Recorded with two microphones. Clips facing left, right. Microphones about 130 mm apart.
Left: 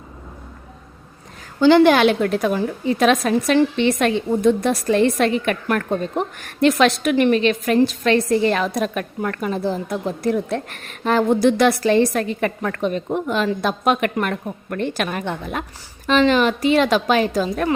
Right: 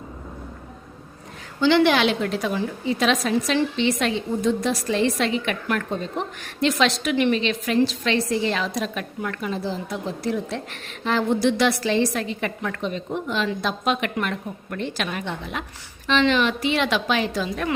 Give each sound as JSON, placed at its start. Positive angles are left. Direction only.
{"t": 1.6, "sound": "a woman's voice", "side_deg": 45}